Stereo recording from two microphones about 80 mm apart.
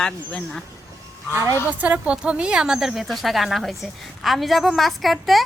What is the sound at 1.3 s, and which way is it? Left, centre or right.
Speech, right.